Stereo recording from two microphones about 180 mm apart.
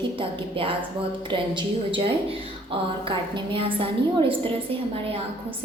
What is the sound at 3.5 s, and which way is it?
Speech, 30° right (ahead or behind).